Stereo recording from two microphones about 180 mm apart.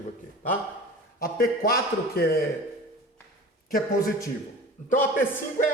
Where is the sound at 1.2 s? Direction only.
55° left (ahead or behind).